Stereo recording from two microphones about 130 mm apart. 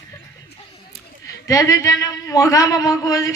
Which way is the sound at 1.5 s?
25° left (ahead or behind).